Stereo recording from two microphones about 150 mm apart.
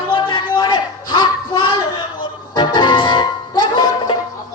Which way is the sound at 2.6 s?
30° left (ahead or behind).